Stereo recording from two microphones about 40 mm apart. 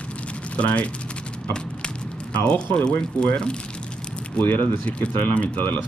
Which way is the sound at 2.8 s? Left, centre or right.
Left.